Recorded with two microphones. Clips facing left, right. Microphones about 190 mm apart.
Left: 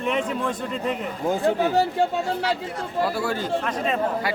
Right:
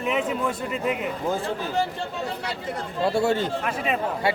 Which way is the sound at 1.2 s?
15° left (ahead or behind).